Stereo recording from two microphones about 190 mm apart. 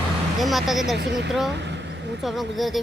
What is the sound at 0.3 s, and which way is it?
Speech, centre (ahead or behind).